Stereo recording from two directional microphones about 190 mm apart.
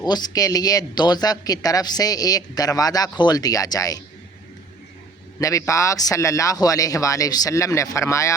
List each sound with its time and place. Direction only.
0.0 s speech: 20° left (ahead or behind)
5.4 s a man's voice: 15° left (ahead or behind)